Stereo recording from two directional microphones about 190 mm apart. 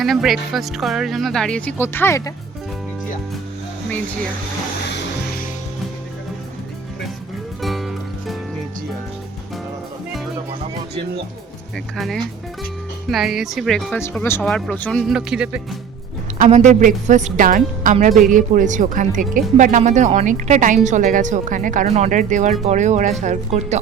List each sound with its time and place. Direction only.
0.0 s speech: centre (ahead or behind)
7.6 s music: centre (ahead or behind)
11.9 s speech: centre (ahead or behind)
16.4 s a woman's voice: 35° right (ahead or behind)